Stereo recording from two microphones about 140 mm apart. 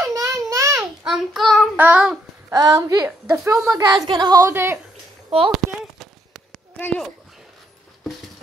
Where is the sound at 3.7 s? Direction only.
30° right (ahead or behind).